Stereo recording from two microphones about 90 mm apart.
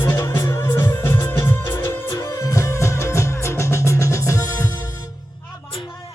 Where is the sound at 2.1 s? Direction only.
35° left (ahead or behind).